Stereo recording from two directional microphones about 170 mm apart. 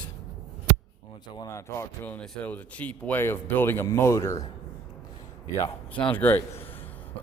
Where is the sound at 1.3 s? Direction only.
15° left (ahead or behind).